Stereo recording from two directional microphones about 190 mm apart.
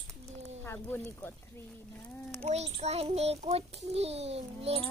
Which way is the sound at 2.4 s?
35° right (ahead or behind).